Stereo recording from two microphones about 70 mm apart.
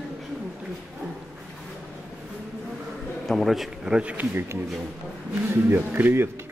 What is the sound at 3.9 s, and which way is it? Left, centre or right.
Speech, centre.